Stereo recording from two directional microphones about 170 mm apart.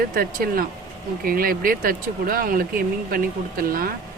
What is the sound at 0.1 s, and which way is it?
Speech, 55° right (ahead or behind).